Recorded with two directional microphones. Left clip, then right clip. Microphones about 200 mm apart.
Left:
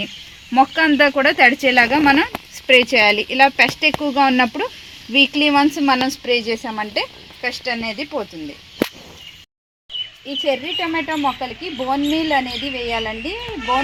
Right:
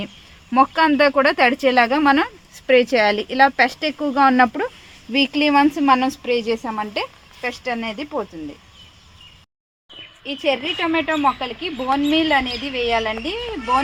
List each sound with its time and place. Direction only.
0.5 s a woman's voice: 5° right (ahead or behind)
10.2 s speech: 20° left (ahead or behind)